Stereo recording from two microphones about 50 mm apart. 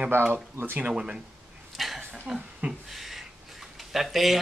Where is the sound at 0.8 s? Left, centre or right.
Centre.